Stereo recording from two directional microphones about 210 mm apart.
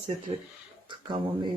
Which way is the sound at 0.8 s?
20° right (ahead or behind).